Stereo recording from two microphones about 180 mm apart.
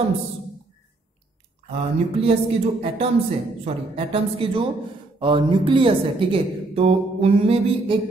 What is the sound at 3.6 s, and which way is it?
A man's voice, 30° right (ahead or behind).